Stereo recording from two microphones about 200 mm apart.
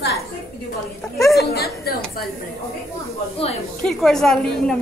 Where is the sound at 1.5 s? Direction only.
50° left (ahead or behind).